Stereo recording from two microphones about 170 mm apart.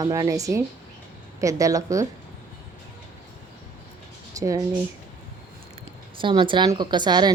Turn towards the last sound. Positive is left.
turn(degrees=-25)  # may be behind; listen again after turning